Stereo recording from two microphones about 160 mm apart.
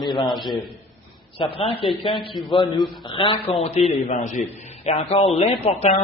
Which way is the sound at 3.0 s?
30° left (ahead or behind).